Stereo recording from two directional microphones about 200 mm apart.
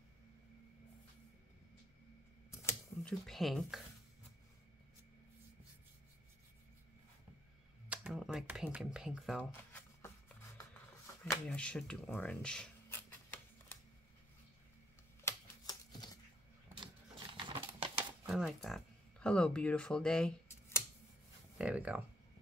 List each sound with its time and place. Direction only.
2.5 s typewriter: 5° left (ahead or behind)
7.9 s speech: 5° right (ahead or behind)
9.4 s shuffling cards: 10° left (ahead or behind)
11.4 s speech: 5° left (ahead or behind)
15.2 s typewriter: 20° left (ahead or behind)
16.7 s a sound: 25° right (ahead or behind)
18.2 s speech: centre (ahead or behind)
21.5 s speech: 5° right (ahead or behind)